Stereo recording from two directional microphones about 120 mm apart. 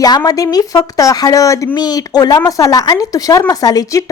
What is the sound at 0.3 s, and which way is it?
Speech, 30° left (ahead or behind).